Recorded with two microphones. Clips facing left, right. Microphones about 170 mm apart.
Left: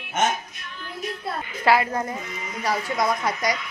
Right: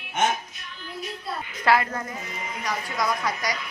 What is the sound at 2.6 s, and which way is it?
Speech, 25° left (ahead or behind).